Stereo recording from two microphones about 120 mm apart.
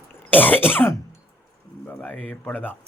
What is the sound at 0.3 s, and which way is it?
Throat clearing, 15° left (ahead or behind).